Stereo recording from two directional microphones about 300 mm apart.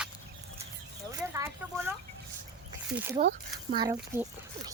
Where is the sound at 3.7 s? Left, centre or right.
Centre.